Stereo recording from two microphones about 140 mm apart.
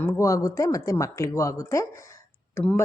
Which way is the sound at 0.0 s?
20° left (ahead or behind).